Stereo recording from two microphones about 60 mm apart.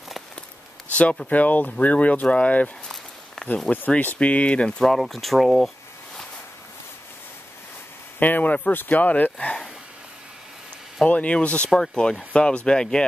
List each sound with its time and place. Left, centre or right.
1.3 s speech: left
3.4 s a sound: centre
3.9 s speech: left
4.8 s speech: centre
8.2 s speech: left
11.1 s speech: left